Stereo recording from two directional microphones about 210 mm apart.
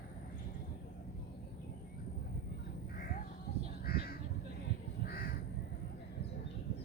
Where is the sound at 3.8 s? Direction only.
45° left (ahead or behind).